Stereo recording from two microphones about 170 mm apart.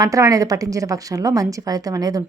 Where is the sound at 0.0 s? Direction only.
20° right (ahead or behind).